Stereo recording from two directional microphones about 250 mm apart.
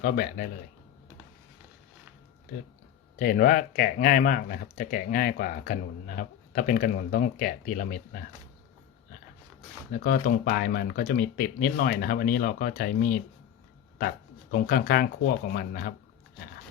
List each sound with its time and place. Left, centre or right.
0.0 s speech: left
3.2 s speech: left
10.0 s speech: left
14.5 s speech: left